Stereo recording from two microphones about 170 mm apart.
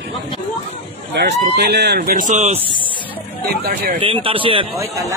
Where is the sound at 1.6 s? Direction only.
80° right; by 2.5 s 45° right (ahead or behind).